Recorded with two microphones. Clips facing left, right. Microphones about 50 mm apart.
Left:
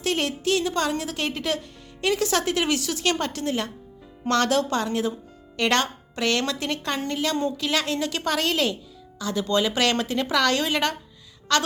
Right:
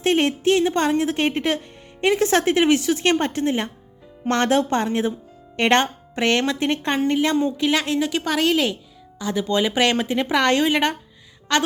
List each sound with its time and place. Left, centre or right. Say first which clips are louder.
0.0 s a woman's voice: right 6 dB; right